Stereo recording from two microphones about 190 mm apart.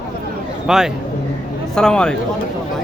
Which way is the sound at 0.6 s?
5° right (ahead or behind).